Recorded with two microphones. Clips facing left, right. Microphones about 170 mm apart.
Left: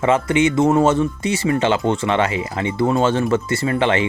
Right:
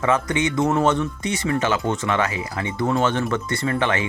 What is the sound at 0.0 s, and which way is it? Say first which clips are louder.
Speech: left 5 dB; 25° left (ahead or behind).